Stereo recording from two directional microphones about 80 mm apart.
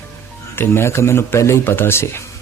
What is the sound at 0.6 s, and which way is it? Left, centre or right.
A man's voice, left.